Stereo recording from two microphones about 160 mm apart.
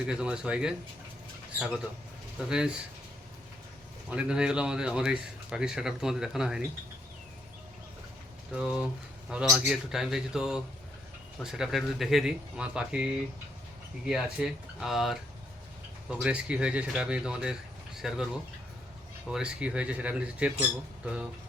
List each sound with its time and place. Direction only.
0.1 s a man's voice: 5° right (ahead or behind)
4.1 s a man's voice: 5° right (ahead or behind)
8.5 s a man's voice: 5° right (ahead or behind)
19.3 s speech: 5° right (ahead or behind)